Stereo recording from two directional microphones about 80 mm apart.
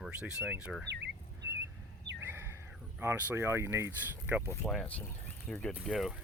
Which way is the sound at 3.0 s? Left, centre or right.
Right.